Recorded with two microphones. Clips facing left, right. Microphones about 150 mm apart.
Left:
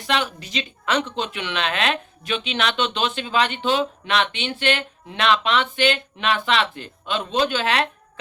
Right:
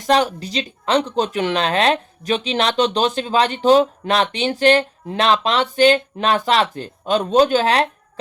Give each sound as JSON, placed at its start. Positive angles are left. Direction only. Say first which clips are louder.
{"t": 0.1, "sound": "speech", "louder": "right 7 dB", "side_deg": -40}